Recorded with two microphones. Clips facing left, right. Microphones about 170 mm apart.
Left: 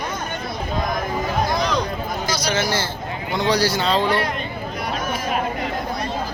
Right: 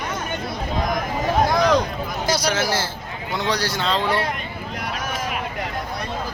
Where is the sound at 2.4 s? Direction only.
5° right (ahead or behind).